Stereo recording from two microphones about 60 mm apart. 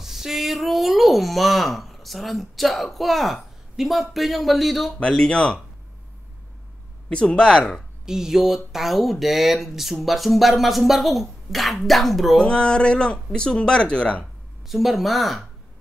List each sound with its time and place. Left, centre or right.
0.0 s speech: centre
5.0 s speech: centre
7.1 s speech: centre
8.0 s speech: centre
12.4 s speech: centre
14.7 s speech: centre